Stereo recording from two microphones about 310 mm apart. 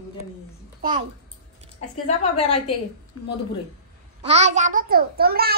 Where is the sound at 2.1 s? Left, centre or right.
Left.